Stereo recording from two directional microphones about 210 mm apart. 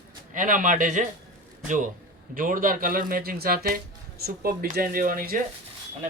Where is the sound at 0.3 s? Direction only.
40° right (ahead or behind).